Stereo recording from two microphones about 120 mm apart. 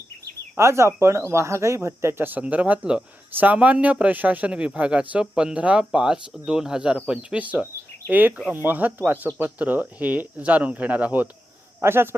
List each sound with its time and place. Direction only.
0.5 s speech: 25° right (ahead or behind)